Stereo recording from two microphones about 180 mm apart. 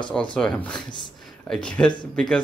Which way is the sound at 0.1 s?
5° left (ahead or behind).